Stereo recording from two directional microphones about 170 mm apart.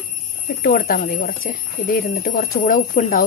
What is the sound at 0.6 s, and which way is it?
Speech, 55° left (ahead or behind).